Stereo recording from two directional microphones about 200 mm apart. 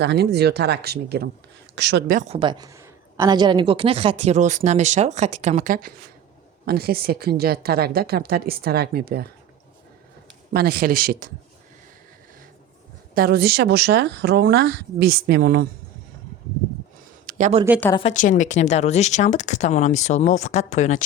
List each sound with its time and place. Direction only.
0.0 s a woman's voice: 55° right (ahead or behind)
2.3 s a woman's voice: 25° right (ahead or behind); by 9.2 s 50° right (ahead or behind)
10.5 s a woman's voice: 50° right (ahead or behind)
13.1 s a woman's voice: 50° right (ahead or behind)
17.2 s a sound: 40° right (ahead or behind)
18.1 s speech: 40° left (ahead or behind)